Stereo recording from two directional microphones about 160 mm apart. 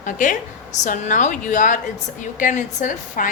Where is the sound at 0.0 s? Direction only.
55° left (ahead or behind).